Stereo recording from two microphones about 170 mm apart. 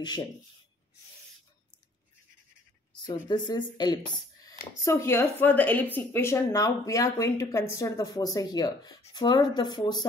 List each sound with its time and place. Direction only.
3.3 s a woman's voice: 25° left (ahead or behind)